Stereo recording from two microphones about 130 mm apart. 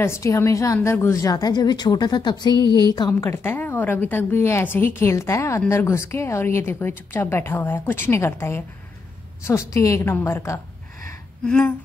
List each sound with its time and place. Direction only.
0.0 s a woman's voice: 20° left (ahead or behind)
3.2 s a woman's voice: 20° left (ahead or behind)
11.4 s a woman's voice: 10° left (ahead or behind)